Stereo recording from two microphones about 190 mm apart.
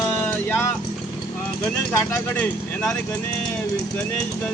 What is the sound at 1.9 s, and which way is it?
Speech, 15° left (ahead or behind).